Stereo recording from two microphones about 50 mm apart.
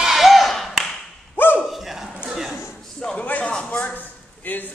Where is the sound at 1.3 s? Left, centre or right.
Left.